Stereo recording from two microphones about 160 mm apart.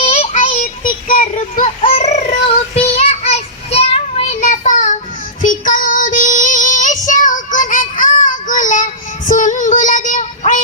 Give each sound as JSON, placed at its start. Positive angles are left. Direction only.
{"t": 0.0, "sound": "child singing", "side_deg": 40}
{"t": 0.5, "sound": "child singing", "side_deg": 60}
{"t": 1.8, "sound": "a sound", "side_deg": 40}
{"t": 2.8, "sound": "child singing", "side_deg": 40}